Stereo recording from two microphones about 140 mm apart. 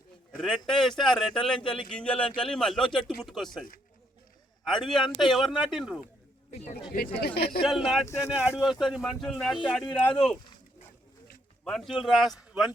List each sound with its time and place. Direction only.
0.3 s speech: 5° left (ahead or behind)
6.9 s speech: 85° left
7.7 s speech: centre (ahead or behind)
8.0 s speech: 20° left (ahead or behind)
8.4 s speech: 5° right (ahead or behind)
11.6 s speech: centre (ahead or behind)